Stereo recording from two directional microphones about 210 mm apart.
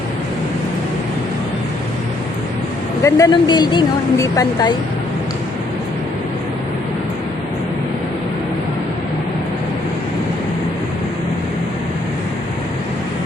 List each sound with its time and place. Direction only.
3.0 s speech: 15° left (ahead or behind)